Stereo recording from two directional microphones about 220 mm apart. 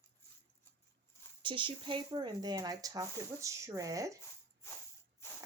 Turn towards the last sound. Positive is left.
turn(degrees=-15)  # may be behind; listen again after turning